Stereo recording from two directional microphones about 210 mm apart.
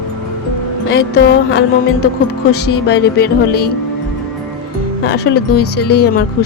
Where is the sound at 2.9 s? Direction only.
50° left (ahead or behind).